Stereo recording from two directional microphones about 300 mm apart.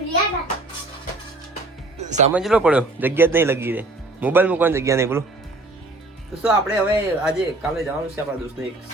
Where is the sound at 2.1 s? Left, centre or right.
Right.